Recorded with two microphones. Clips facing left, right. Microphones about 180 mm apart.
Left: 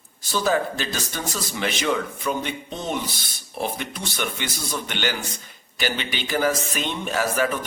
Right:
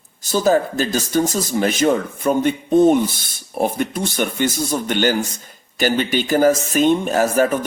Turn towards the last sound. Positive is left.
turn(degrees=-45)  # may be behind; listen again after turning